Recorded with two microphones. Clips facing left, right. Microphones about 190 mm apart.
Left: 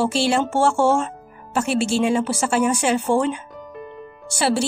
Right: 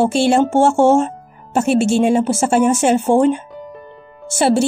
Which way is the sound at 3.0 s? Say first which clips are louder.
Right 5 dB; 25° right (ahead or behind).